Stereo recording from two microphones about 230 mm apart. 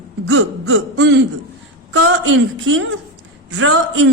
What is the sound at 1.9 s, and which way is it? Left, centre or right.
A woman's voice, right.